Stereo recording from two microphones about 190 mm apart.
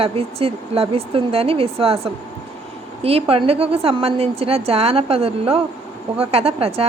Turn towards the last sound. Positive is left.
turn(degrees=-30)  # may be behind; listen again after turning